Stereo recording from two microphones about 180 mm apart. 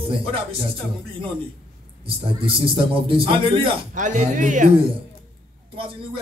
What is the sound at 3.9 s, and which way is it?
Speech, 45° right (ahead or behind).